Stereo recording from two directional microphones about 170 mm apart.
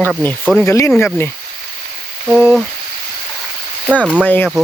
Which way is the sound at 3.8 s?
5° right (ahead or behind).